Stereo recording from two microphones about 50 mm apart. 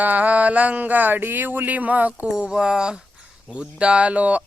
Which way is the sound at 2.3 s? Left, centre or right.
Centre.